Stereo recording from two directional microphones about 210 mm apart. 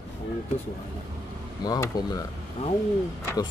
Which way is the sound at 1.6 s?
20° left (ahead or behind).